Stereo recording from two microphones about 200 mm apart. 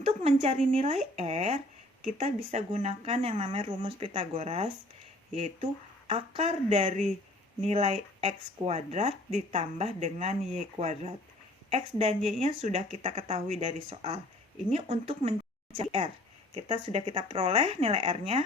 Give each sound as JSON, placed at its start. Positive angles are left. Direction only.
{"t": 0.0, "sound": "speech", "side_deg": -30}